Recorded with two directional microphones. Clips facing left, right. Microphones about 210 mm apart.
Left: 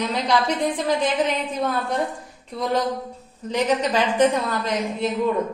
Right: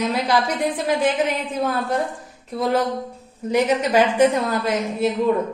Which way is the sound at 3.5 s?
10° right (ahead or behind).